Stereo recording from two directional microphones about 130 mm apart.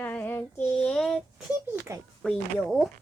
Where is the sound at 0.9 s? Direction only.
Centre (ahead or behind).